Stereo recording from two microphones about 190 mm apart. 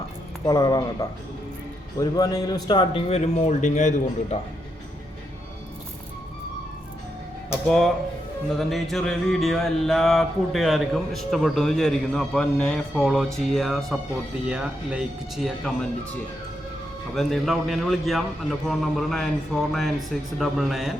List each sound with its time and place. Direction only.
0.4 s a man's voice: 20° left (ahead or behind); by 4.4 s 40° left (ahead or behind)
7.5 s speech: centre (ahead or behind)
8.5 s music: centre (ahead or behind)
17.2 s music: centre (ahead or behind)